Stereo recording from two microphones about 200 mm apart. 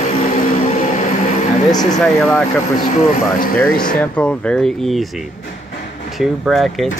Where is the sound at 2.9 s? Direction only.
45° left (ahead or behind).